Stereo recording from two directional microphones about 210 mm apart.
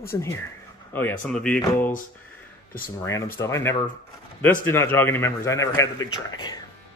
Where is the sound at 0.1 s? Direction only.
15° left (ahead or behind).